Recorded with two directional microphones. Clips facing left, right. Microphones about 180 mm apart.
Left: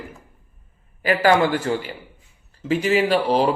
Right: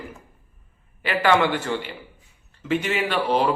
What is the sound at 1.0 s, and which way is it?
Speech, 40° left (ahead or behind).